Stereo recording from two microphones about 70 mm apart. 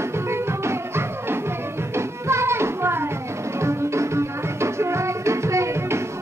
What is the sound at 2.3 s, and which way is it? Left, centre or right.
Music, right.